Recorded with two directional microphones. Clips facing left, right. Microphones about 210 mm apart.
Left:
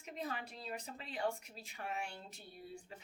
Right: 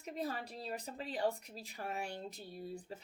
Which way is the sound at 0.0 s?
35° right (ahead or behind).